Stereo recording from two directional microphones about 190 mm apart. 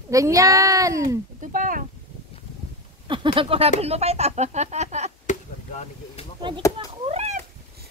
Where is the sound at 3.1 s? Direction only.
25° right (ahead or behind).